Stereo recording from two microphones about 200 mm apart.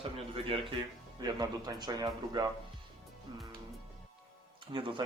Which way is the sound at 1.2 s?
20° right (ahead or behind).